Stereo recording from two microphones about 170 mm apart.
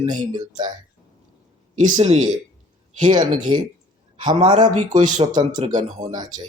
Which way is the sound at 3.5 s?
25° right (ahead or behind).